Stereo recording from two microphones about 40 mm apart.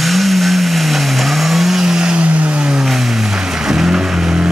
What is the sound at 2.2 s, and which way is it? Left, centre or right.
Vehicle, right.